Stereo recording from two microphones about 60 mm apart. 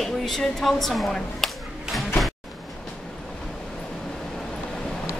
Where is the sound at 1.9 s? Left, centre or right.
Centre.